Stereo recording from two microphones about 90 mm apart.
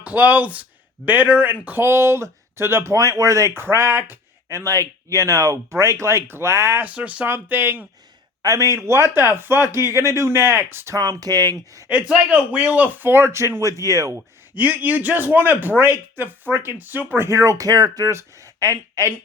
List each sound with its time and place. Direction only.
0.0 s speech: 20° right (ahead or behind)
6.8 s speech: 15° right (ahead or behind)
7.3 s speech: 25° right (ahead or behind)
8.4 s speech: 35° right (ahead or behind)
10.9 s speech: 40° right (ahead or behind)
11.9 s speech: 15° right (ahead or behind); by 14.2 s 40° right (ahead or behind)
14.2 s speech: 20° right (ahead or behind)
17.2 s speech: 35° right (ahead or behind)